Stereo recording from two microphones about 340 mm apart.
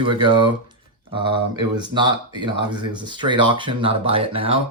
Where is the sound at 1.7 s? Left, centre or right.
Centre.